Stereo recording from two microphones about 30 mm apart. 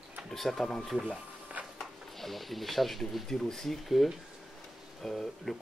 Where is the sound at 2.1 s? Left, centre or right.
Centre.